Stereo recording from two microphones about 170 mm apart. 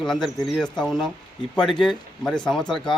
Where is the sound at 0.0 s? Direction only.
5° left (ahead or behind).